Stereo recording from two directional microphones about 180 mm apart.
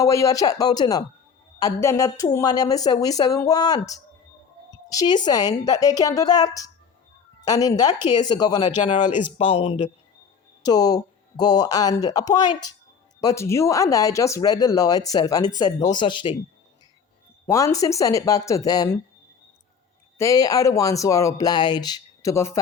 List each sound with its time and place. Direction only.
0.0 s speech: 20° left (ahead or behind)
8.7 s speech: 40° left (ahead or behind)
9.4 s speech: 30° left (ahead or behind)
10.6 s speech: 20° left (ahead or behind)
17.4 s speech: 15° left (ahead or behind)
20.1 s speech: 20° left (ahead or behind)